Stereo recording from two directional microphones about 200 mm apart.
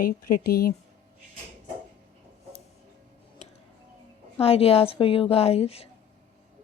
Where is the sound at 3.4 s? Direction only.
35° left (ahead or behind).